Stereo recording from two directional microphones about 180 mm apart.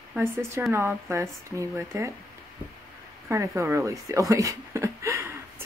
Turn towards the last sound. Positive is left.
turn(degrees=-15)  # may be behind; listen again after turning